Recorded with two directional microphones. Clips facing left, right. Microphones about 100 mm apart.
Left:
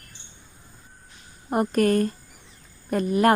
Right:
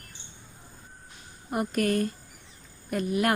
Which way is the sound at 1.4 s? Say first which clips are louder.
Left 6 dB; 45° left (ahead or behind).